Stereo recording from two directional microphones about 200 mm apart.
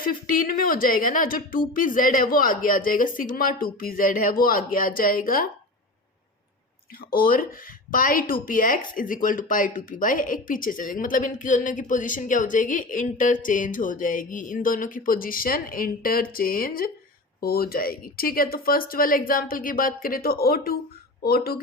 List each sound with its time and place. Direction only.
0.0 s speech: 45° left (ahead or behind)
7.1 s speech: 45° left (ahead or behind)